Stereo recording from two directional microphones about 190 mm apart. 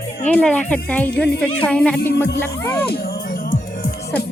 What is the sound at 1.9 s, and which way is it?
Speech, 60° left (ahead or behind).